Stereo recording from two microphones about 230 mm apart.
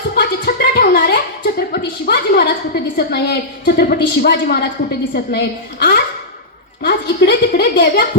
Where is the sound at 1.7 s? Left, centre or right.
Left.